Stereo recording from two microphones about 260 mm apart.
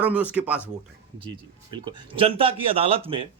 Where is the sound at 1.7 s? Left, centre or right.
Centre.